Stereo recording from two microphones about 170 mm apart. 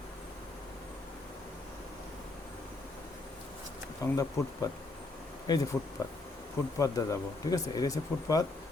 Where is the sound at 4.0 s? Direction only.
20° left (ahead or behind).